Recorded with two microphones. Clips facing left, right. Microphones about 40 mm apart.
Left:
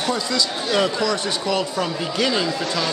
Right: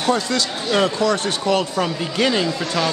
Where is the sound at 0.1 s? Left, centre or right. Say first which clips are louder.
Right 4 dB; right.